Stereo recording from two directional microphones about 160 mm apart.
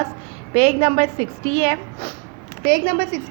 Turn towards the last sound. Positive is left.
turn(degrees=-70)  # may be behind; listen again after turning